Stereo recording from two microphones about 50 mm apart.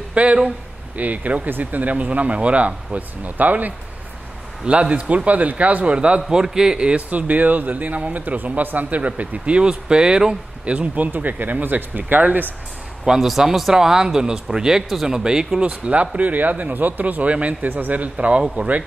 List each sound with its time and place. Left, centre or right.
0.1 s speech: right
4.6 s speech: right
7.1 s speech: right
11.1 s speech: right
13.0 s a man's voice: centre